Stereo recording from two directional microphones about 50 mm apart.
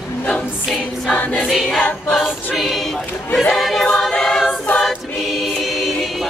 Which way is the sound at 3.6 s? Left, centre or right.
Centre.